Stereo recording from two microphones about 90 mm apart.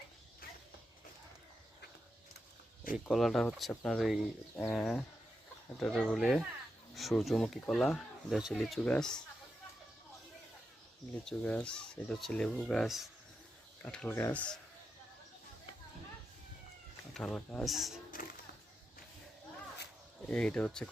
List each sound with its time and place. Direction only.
3.1 s speech: centre (ahead or behind)
8.8 s speech: 10° left (ahead or behind)
11.3 s speech: 15° left (ahead or behind)
14.1 s speech: 30° left (ahead or behind)
14.3 s speech: 10° left (ahead or behind)
17.2 s speech: 5° left (ahead or behind)
20.2 s speech: 15° left (ahead or behind)